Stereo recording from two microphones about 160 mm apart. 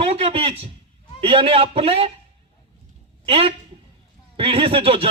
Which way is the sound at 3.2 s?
35° right (ahead or behind).